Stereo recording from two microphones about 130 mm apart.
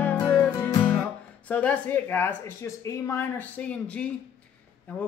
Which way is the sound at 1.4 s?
10° left (ahead or behind).